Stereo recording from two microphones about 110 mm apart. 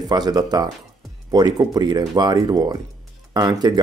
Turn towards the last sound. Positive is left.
turn(degrees=-35)  # may be behind; listen again after turning